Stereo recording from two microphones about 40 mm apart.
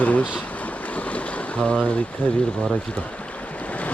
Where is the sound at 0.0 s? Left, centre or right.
Left.